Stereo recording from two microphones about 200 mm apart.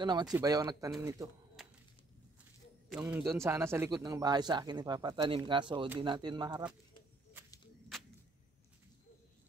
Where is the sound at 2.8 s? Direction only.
10° right (ahead or behind).